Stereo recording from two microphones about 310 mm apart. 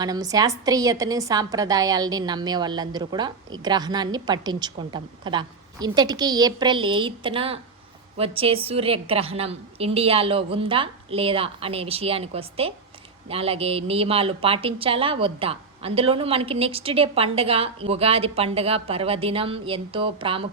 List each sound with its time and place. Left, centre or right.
0.0 s a woman's voice: centre